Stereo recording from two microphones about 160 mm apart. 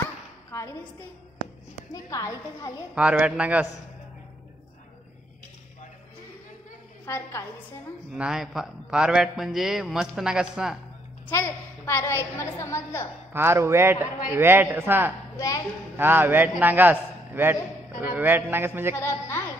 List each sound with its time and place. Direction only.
2.0 s a woman's voice: 20° left (ahead or behind)
2.9 s a man's voice: 10° right (ahead or behind)
7.1 s a woman's voice: 15° left (ahead or behind)
8.1 s a man's voice: 5° right (ahead or behind)
11.2 s a woman's voice: 15° left (ahead or behind)
13.3 s a man's voice: 15° right (ahead or behind)
15.3 s a woman's voice: 20° left (ahead or behind)
16.0 s a man's voice: 15° right (ahead or behind)
18.9 s a woman's voice: 15° left (ahead or behind)